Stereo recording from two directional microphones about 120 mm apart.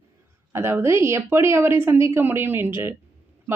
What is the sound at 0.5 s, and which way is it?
Speech, 20° right (ahead or behind).